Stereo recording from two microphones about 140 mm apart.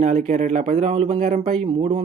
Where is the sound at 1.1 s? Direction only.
70° right (ahead or behind).